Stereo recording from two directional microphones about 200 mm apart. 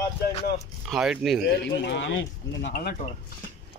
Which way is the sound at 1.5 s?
60° left (ahead or behind).